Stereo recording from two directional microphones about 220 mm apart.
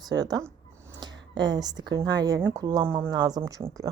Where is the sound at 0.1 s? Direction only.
20° right (ahead or behind).